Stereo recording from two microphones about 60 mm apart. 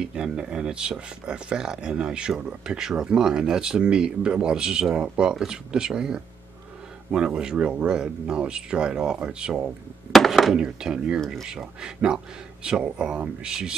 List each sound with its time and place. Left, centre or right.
0.0 s speech: centre
5.3 s speech: centre
10.1 s a sound: centre
10.5 s speech: centre